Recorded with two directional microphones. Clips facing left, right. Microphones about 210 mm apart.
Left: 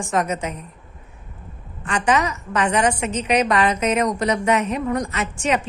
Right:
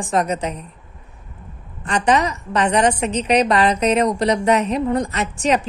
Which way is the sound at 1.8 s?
35° right (ahead or behind).